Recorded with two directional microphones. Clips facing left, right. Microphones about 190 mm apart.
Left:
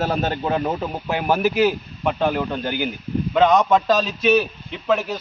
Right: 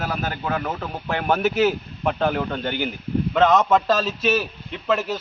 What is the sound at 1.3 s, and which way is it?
A man's voice, centre (ahead or behind).